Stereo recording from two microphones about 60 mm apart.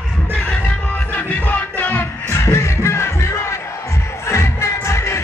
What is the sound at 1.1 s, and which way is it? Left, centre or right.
Music, left.